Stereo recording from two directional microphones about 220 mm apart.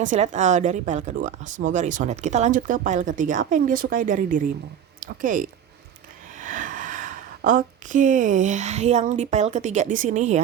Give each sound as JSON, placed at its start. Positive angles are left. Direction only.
{"t": 0.0, "sound": "speech", "side_deg": -35}